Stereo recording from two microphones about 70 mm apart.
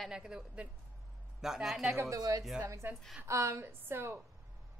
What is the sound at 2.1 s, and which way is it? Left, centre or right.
Speech, right.